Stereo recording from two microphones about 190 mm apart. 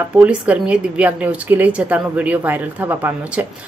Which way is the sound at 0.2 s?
5° right (ahead or behind).